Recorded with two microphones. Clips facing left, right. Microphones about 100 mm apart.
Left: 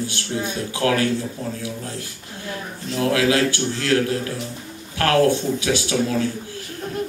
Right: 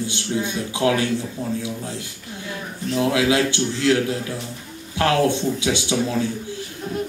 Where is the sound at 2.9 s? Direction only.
20° right (ahead or behind).